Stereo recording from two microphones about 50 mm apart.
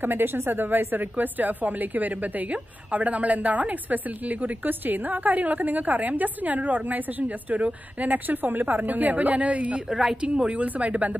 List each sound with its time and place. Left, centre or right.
0.0 s a woman's voice: right
9.8 s a woman's voice: centre; by 11.1 s right